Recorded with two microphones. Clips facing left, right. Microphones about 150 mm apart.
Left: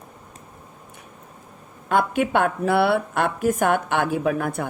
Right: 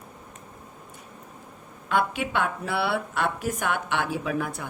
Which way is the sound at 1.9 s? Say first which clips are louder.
Left 5 dB; 45° left (ahead or behind).